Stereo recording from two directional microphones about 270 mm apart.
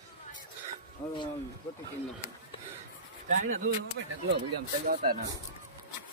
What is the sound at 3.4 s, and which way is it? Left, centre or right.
Speech, right.